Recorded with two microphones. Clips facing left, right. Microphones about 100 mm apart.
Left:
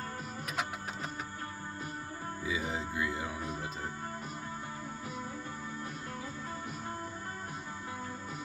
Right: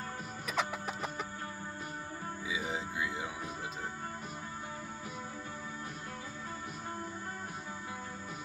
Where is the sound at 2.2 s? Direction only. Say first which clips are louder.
Left 2 dB; 10° right (ahead or behind).